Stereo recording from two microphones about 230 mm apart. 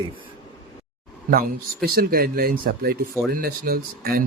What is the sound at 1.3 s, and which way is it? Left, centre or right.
Speech, right.